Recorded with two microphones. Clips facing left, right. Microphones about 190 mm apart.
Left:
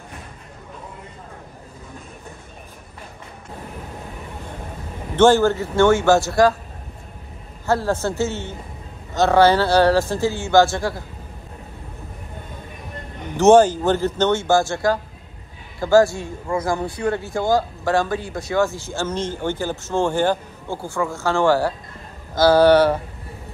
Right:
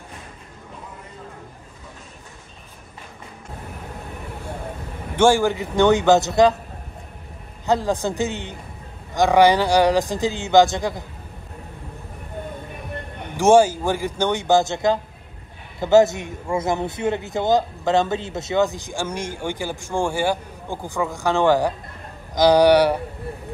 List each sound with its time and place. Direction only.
5.1 s a man's voice: 10° right (ahead or behind)
7.6 s a man's voice: 15° right (ahead or behind)
13.4 s a man's voice: 10° right (ahead or behind)